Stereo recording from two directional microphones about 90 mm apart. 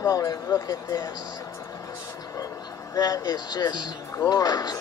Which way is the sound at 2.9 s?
45° left (ahead or behind).